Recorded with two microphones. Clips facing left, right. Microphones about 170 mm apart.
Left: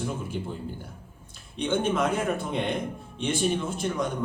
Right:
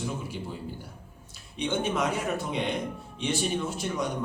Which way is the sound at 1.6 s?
50° left (ahead or behind).